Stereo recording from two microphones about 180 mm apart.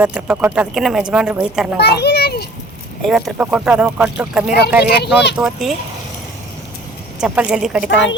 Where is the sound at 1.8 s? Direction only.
65° left (ahead or behind).